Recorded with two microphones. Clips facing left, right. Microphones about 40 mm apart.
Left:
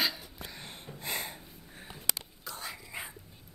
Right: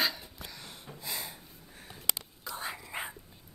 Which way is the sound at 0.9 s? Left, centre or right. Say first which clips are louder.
Left 3 dB; left.